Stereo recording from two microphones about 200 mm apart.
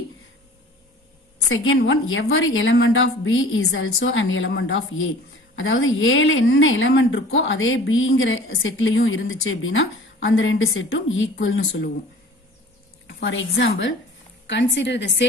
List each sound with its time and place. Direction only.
1.5 s a woman's voice: 85° left
13.0 s a woman's voice: 70° left (ahead or behind)